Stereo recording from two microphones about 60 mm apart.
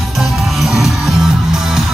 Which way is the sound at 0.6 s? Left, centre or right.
Centre.